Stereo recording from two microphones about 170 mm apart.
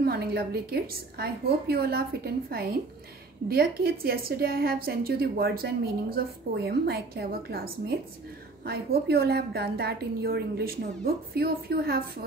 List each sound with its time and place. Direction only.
0.0 s a woman's voice: 70° right (ahead or behind)